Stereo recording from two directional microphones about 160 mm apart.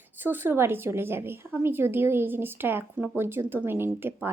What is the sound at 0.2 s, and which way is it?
A woman's voice, 15° right (ahead or behind).